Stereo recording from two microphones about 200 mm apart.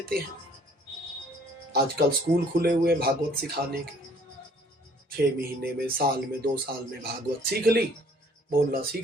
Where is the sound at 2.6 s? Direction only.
50° right (ahead or behind).